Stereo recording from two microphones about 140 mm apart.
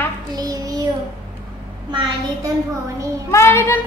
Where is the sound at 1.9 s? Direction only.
35° right (ahead or behind).